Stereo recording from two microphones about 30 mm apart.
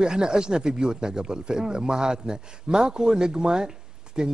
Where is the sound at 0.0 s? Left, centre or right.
Right.